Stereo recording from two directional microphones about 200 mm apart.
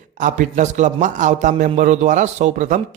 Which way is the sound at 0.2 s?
40° right (ahead or behind).